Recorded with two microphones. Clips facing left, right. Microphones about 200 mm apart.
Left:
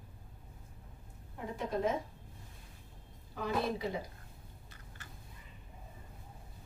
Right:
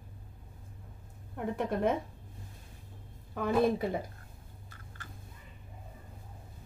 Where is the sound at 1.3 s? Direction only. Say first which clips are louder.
Right 4 dB; 60° right (ahead or behind).